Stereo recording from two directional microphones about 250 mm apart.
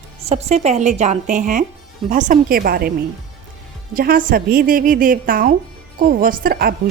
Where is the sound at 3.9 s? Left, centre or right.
Right.